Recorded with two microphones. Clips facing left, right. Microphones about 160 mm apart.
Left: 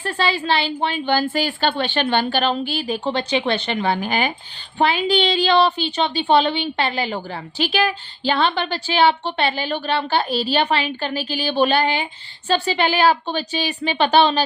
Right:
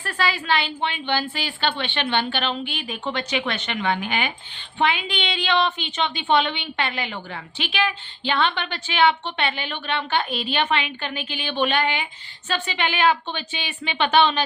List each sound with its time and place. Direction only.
0.0 s a woman's voice: 30° left (ahead or behind)